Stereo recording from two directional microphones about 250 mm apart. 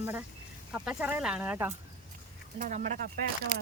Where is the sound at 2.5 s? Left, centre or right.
Right.